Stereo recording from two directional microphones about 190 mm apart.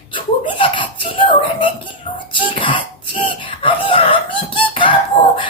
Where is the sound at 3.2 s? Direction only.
25° left (ahead or behind).